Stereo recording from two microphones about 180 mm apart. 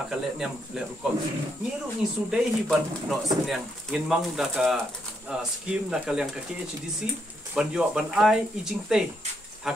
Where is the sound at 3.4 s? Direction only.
Centre (ahead or behind).